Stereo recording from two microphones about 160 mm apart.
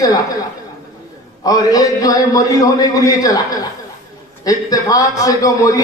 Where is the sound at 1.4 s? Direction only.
20° left (ahead or behind).